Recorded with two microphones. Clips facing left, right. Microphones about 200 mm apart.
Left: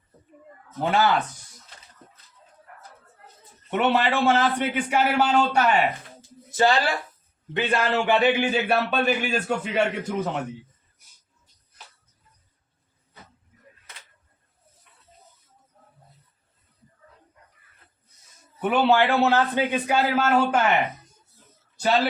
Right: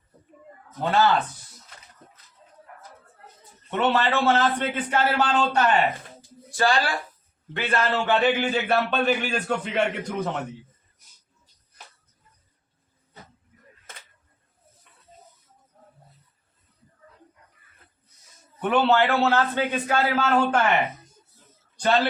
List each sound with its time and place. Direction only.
0.9 s a man's voice: 10° left (ahead or behind)
3.7 s a man's voice: 15° left (ahead or behind)
6.5 s a man's voice: 20° left (ahead or behind)
18.6 s a man's voice: 10° left (ahead or behind)